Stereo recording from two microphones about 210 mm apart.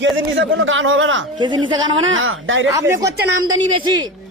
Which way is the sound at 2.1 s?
70° right (ahead or behind).